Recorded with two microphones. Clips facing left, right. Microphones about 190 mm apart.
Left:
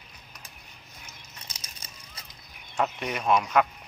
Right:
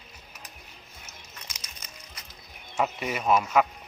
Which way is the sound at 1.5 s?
30° left (ahead or behind).